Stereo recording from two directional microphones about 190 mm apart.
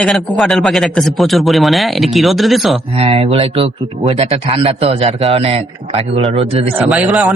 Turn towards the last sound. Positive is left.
turn(degrees=-5)  # may be behind; listen again after turning